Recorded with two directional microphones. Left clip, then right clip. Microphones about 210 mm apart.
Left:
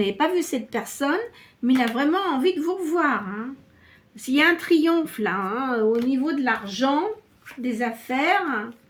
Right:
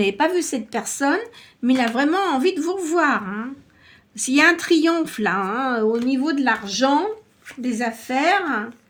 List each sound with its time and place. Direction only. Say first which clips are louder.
0.0 s a woman's voice: right 3 dB; 40° right (ahead or behind)